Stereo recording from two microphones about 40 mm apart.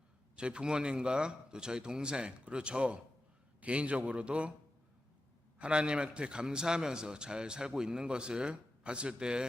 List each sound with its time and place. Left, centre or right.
0.3 s a man's voice: right
5.5 s a man's voice: right